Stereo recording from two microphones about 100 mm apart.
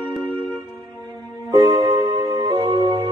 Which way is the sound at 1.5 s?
45° right (ahead or behind).